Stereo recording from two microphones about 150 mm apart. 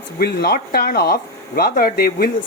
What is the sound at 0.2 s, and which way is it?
Speech, 90° left.